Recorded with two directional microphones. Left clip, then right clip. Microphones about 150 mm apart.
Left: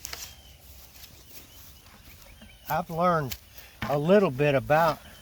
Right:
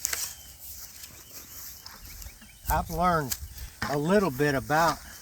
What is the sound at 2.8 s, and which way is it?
Speech, 45° left (ahead or behind).